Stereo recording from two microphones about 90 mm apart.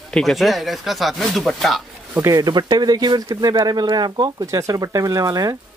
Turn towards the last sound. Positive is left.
turn(degrees=-40)  # may be behind; listen again after turning